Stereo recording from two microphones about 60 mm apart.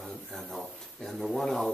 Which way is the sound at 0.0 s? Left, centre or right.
Centre.